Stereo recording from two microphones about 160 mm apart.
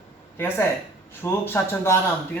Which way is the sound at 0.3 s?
15° left (ahead or behind).